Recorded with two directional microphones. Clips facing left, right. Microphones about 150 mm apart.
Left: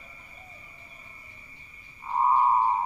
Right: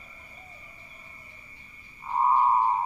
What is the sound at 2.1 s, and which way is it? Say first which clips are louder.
Frog: even; centre (ahead or behind).